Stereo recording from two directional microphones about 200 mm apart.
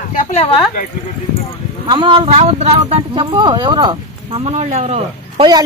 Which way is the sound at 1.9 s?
25° right (ahead or behind).